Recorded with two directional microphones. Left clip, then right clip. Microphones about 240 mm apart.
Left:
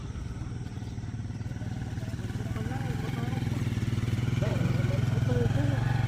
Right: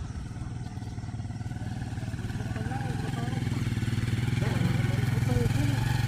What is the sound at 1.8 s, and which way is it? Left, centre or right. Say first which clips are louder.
Vehicle: right 1 dB; centre.